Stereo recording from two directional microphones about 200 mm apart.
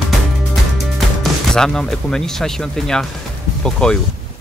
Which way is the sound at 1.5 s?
5° left (ahead or behind).